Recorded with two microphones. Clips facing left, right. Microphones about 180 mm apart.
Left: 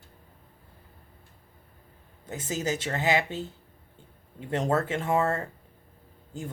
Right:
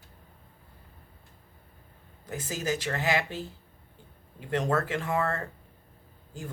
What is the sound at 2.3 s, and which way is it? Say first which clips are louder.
Speech: left 1 dB; 25° left (ahead or behind).